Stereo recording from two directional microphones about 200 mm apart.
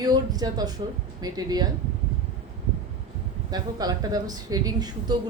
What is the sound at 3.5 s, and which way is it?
A woman's voice, 20° right (ahead or behind).